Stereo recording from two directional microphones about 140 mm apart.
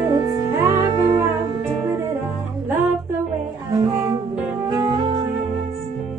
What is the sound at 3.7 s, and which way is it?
Music, 25° right (ahead or behind).